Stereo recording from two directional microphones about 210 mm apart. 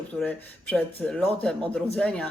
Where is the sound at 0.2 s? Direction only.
5° left (ahead or behind).